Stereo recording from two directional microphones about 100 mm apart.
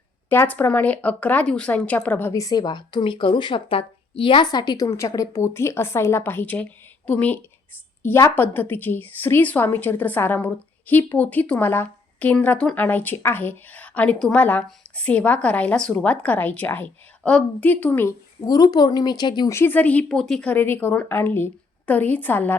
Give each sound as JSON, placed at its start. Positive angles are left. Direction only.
{"t": 0.3, "sound": "a woman's voice", "side_deg": 20}
{"t": 2.3, "sound": "speech", "side_deg": 35}
{"t": 4.9, "sound": "a woman's voice", "side_deg": 30}
{"t": 18.4, "sound": "speech", "side_deg": 40}
{"t": 19.5, "sound": "a woman's voice", "side_deg": 25}
{"t": 20.1, "sound": "a woman's voice", "side_deg": 5}
{"t": 20.5, "sound": "a woman's voice", "side_deg": 20}